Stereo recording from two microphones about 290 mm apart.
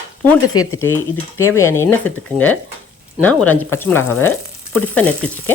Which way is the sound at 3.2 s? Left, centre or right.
Centre.